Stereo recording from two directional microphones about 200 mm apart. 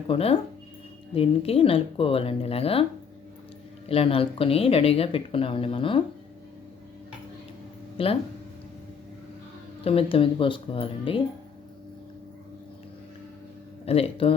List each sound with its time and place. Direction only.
0.1 s speech: 30° left (ahead or behind)
3.8 s speech: 30° left (ahead or behind)
8.0 s speech: 25° left (ahead or behind)
9.8 s speech: 30° left (ahead or behind)
13.8 s speech: 30° left (ahead or behind)